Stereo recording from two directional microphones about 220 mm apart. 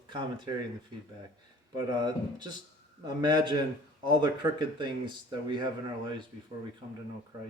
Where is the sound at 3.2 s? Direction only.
20° right (ahead or behind).